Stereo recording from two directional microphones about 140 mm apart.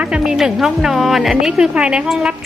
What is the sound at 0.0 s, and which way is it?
A woman's voice, 5° right (ahead or behind).